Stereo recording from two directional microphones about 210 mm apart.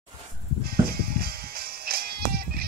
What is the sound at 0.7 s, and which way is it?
Music, 45° right (ahead or behind).